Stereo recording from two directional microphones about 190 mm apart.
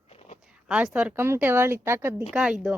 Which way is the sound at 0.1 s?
35° left (ahead or behind).